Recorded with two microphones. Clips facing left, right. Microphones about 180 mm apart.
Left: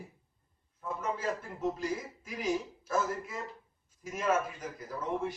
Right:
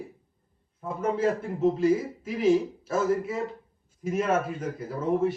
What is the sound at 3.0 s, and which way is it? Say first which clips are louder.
Speech: right 10 dB; 55° right (ahead or behind).